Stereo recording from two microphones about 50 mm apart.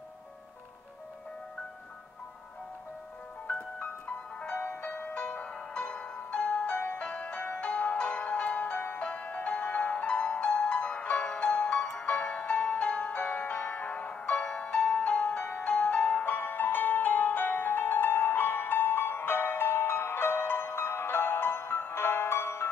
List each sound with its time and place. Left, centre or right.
3.4 s music: left